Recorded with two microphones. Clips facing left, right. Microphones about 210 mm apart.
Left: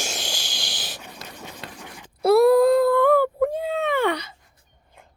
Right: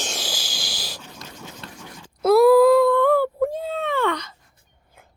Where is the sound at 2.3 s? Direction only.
Centre (ahead or behind).